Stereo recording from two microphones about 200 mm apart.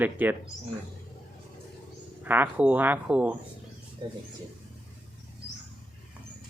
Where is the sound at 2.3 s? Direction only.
10° right (ahead or behind).